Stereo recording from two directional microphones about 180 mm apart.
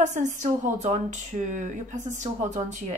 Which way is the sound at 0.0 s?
45° right (ahead or behind).